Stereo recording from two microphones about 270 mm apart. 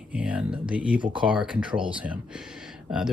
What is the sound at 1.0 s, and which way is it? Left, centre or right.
Speech, centre.